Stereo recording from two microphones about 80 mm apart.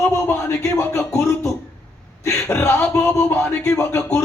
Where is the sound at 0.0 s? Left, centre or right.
Left.